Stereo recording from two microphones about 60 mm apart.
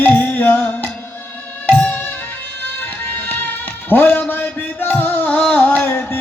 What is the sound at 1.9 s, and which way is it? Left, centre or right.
Music, left.